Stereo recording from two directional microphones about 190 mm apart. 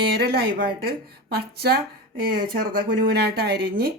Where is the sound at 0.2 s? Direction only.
55° right (ahead or behind).